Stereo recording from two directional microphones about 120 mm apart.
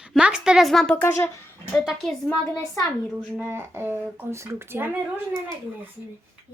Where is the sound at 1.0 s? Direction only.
20° left (ahead or behind).